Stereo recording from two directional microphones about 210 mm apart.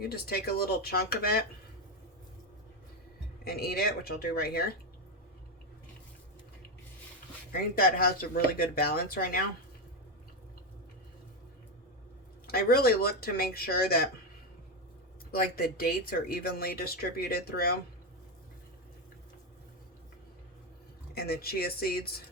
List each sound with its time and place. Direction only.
0.1 s speech: 45° left (ahead or behind)
3.4 s speech: 45° left (ahead or behind)
7.5 s speech: 45° left (ahead or behind)
12.5 s speech: 45° left (ahead or behind)
15.3 s speech: 45° left (ahead or behind)
21.2 s speech: 50° left (ahead or behind)